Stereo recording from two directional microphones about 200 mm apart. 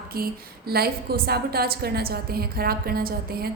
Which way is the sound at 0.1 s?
50° right (ahead or behind).